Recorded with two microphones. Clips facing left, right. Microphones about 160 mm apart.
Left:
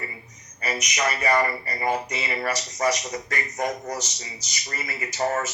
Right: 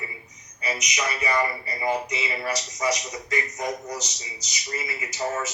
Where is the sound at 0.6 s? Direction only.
50° left (ahead or behind).